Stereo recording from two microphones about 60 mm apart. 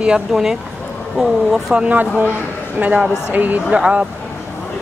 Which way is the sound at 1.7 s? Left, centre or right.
Centre.